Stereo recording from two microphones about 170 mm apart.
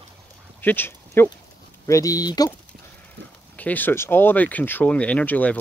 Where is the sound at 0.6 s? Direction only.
10° left (ahead or behind).